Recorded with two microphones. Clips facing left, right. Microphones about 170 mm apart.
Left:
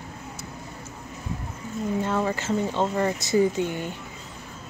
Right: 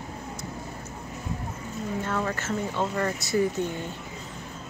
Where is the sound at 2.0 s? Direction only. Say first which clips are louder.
Left 4 dB; 20° left (ahead or behind).